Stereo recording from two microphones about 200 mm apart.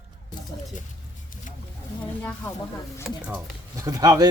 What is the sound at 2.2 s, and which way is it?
Speech, 10° left (ahead or behind).